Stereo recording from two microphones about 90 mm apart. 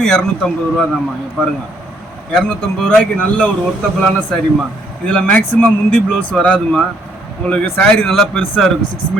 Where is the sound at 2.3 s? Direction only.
5° left (ahead or behind).